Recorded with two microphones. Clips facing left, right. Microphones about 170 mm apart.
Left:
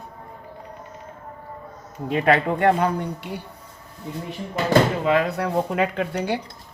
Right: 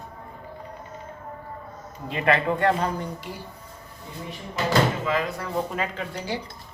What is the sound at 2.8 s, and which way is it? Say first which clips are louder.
Speech: left 4 dB; 65° left (ahead or behind).